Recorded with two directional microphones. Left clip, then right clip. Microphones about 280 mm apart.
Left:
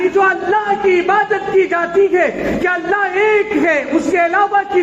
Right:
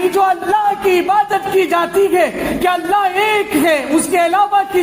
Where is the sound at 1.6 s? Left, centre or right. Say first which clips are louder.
Left 1 dB; right.